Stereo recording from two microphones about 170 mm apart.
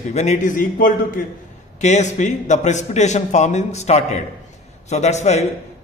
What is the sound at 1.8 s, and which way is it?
A man's voice, 45° left (ahead or behind).